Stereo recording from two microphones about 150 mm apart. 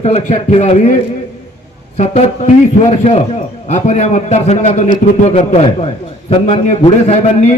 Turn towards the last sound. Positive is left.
turn(degrees=45)  # may be behind; listen again after turning